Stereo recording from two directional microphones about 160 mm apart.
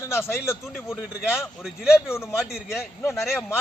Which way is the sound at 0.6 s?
Centre (ahead or behind).